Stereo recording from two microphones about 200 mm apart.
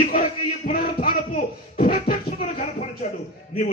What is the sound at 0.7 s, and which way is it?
Music, 40° left (ahead or behind).